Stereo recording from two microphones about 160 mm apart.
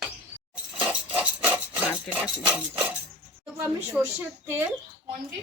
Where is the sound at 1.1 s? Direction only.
10° right (ahead or behind).